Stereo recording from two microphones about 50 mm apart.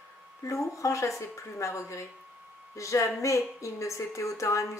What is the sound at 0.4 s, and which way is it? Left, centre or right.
A woman's voice, left.